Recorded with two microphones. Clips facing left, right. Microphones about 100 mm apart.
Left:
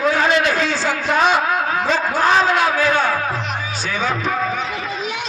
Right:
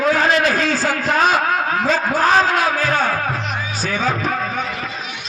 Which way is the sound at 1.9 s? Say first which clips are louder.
Even; 40° right (ahead or behind).